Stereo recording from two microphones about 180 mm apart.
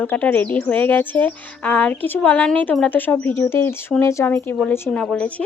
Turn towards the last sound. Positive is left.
turn(degrees=5)  # may be behind; listen again after turning